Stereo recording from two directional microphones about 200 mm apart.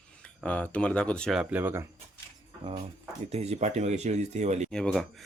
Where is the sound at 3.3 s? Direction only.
30° right (ahead or behind).